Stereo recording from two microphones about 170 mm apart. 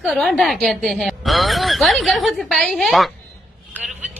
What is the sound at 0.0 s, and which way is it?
A woman's voice, centre (ahead or behind).